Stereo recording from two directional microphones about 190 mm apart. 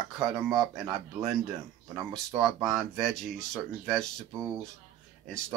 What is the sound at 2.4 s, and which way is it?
Speech, centre (ahead or behind).